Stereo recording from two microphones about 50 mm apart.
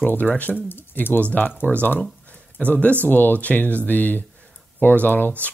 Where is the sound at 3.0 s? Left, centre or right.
Left.